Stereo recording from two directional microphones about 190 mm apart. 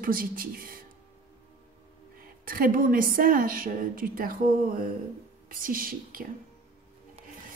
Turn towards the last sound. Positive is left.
turn(degrees=-50)  # may be behind; listen again after turning